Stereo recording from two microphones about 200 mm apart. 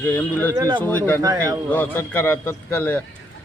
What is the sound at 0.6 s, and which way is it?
A man's voice, 20° right (ahead or behind).